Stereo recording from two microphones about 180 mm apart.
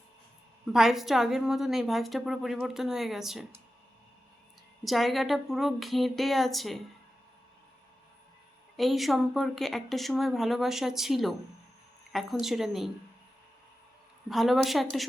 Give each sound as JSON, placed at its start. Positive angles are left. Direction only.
{"t": 0.7, "sound": "a woman's voice", "side_deg": 0}
{"t": 4.8, "sound": "a woman's voice", "side_deg": 0}
{"t": 8.7, "sound": "a woman's voice", "side_deg": 0}
{"t": 14.3, "sound": "a woman's voice", "side_deg": 0}